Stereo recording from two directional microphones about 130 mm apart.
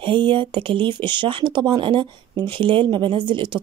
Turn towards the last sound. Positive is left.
turn(degrees=-40)  # may be behind; listen again after turning